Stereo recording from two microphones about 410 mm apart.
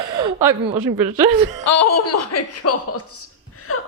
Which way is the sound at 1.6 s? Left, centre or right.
Left.